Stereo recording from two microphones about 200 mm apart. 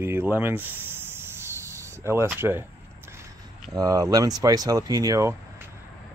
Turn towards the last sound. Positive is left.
turn(degrees=-15)  # may be behind; listen again after turning